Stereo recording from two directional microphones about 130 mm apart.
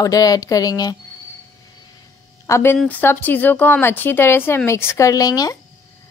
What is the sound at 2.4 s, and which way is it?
A woman's voice, 20° left (ahead or behind).